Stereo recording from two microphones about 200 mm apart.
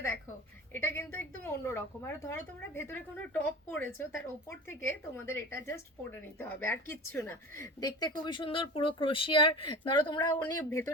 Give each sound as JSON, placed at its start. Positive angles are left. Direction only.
{"t": 0.7, "sound": "a woman's voice", "side_deg": 10}